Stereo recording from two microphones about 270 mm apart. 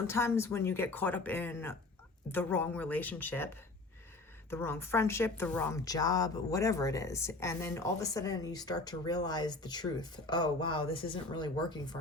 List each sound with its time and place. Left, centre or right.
0.1 s a woman's voice: centre